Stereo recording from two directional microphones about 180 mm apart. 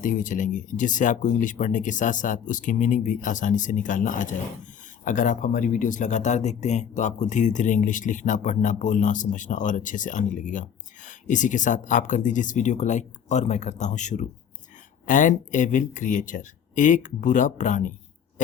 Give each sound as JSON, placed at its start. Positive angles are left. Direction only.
{"t": 0.0, "sound": "speech", "side_deg": 50}